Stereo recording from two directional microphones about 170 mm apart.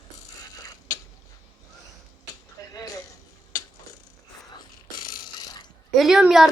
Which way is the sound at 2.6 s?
20° left (ahead or behind).